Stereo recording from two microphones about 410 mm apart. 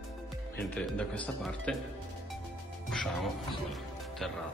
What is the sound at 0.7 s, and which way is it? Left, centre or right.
Speech, centre.